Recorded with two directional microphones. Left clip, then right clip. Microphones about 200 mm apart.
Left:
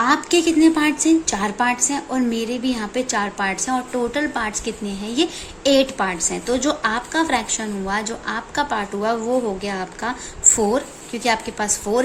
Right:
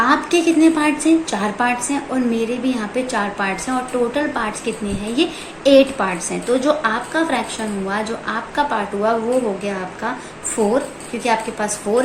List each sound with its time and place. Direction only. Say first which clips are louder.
0.0 s a woman's voice: right 2 dB; 55° left (ahead or behind)